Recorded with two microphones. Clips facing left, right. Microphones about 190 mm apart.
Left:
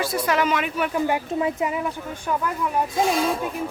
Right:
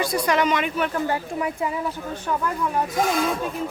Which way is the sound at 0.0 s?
5° left (ahead or behind).